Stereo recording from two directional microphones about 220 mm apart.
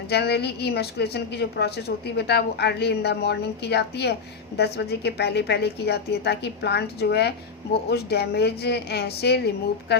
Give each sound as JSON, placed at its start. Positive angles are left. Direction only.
{"t": 0.1, "sound": "a woman's voice", "side_deg": 45}